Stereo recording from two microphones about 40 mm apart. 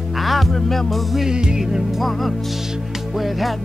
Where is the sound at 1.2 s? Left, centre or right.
Right.